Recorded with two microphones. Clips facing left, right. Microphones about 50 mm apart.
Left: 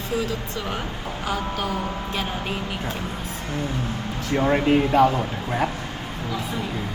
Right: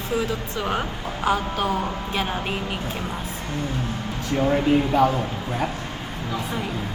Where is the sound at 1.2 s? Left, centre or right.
Right.